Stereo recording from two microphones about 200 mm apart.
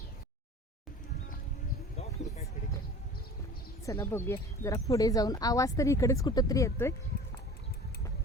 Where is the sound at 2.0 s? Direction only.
30° left (ahead or behind).